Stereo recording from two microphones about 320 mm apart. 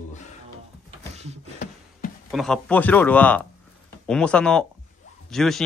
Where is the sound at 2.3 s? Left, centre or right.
Centre.